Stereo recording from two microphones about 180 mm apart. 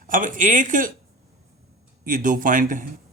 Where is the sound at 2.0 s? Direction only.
50° right (ahead or behind).